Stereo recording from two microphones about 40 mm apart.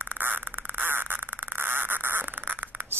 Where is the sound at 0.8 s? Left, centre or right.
Right.